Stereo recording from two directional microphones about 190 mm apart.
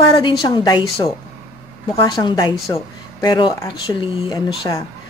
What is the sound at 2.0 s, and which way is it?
Speech, 20° left (ahead or behind).